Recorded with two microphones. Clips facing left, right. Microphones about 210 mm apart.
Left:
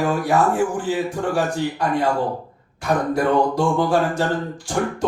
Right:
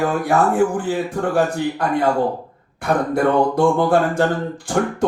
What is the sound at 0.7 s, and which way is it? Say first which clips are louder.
Speech: right 1 dB; 55° right (ahead or behind).